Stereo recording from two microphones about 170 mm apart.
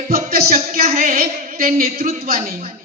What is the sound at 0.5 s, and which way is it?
A woman's voice, 40° right (ahead or behind).